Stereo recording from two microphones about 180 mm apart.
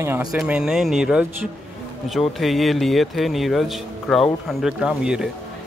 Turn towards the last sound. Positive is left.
turn(degrees=-5)  # may be behind; listen again after turning